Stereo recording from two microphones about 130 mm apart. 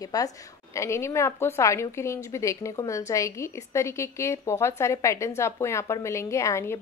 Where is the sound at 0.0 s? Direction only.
30° left (ahead or behind).